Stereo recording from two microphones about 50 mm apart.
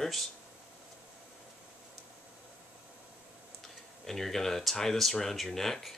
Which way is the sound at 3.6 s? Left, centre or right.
Centre.